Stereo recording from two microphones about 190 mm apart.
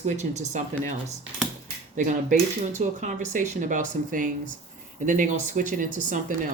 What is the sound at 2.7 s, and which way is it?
Speech, 40° right (ahead or behind).